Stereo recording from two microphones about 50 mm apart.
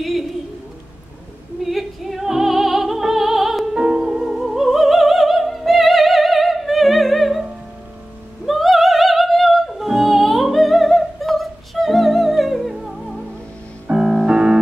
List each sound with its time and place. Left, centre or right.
1.6 s music: centre
5.7 s opera: centre
8.5 s music: centre